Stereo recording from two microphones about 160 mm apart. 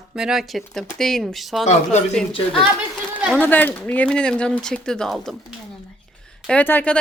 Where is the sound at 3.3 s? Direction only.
10° left (ahead or behind).